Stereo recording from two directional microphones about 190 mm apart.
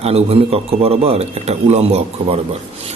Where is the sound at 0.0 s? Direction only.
30° right (ahead or behind).